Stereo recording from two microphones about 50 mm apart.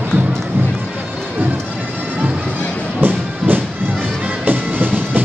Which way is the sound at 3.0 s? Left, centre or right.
Right.